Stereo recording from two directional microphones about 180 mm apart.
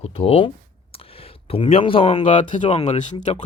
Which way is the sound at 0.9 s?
30° left (ahead or behind).